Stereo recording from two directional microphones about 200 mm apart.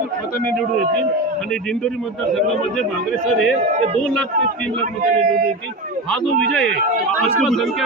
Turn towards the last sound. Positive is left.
turn(degrees=0)  # may be behind; listen again after turning